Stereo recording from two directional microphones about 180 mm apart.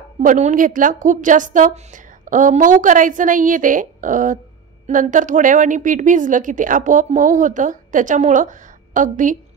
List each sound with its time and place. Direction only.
0.2 s a woman's voice: 45° right (ahead or behind)